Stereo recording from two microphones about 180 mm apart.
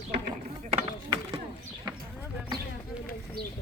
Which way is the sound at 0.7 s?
35° right (ahead or behind).